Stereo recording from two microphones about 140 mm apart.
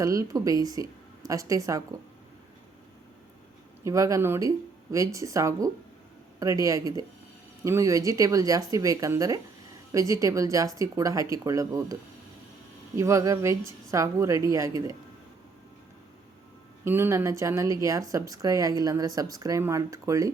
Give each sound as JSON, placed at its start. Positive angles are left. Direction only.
{"t": 0.0, "sound": "speech", "side_deg": -25}
{"t": 3.8, "sound": "speech", "side_deg": -20}
{"t": 13.0, "sound": "speech", "side_deg": -20}
{"t": 16.8, "sound": "speech", "side_deg": -15}